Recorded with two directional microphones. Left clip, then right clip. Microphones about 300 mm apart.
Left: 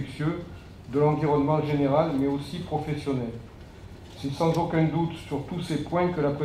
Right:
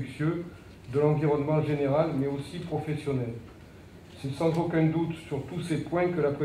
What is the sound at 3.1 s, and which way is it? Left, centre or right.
Speech, left.